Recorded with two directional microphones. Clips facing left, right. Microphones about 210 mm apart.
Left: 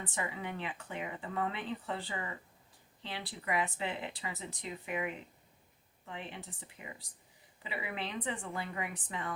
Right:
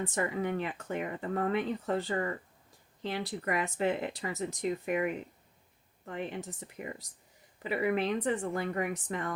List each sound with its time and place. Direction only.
0.0 s speech: 45° right (ahead or behind)